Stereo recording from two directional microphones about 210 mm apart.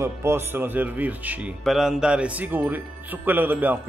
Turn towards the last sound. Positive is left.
turn(degrees=-10)  # may be behind; listen again after turning